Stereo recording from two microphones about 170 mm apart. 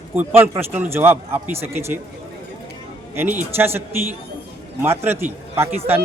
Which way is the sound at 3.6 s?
15° right (ahead or behind).